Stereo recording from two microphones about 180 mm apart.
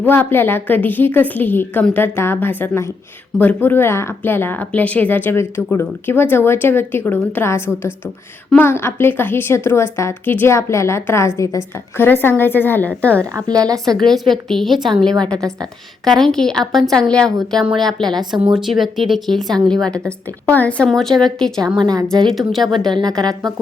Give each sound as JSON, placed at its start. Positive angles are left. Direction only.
{"t": 0.0, "sound": "speech", "side_deg": 10}
{"t": 13.3, "sound": "a woman's voice", "side_deg": -20}
{"t": 14.0, "sound": "a woman's voice", "side_deg": 0}
{"t": 21.8, "sound": "a woman's voice", "side_deg": -20}
{"t": 22.0, "sound": "a woman's voice", "side_deg": 5}